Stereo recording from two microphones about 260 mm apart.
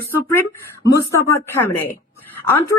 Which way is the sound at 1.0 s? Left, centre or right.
Centre.